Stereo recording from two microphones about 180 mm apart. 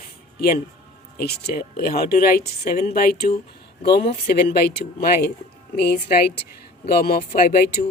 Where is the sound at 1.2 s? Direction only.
60° left (ahead or behind).